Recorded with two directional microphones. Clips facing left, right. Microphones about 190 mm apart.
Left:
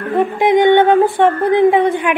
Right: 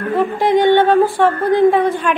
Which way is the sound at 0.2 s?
15° left (ahead or behind).